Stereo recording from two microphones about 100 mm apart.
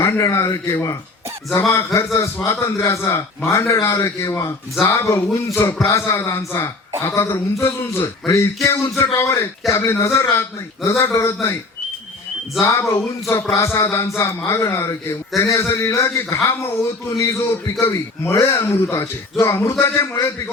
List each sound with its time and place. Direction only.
0.0 s a man's voice: 30° left (ahead or behind)
12.5 s a man's voice: 25° left (ahead or behind)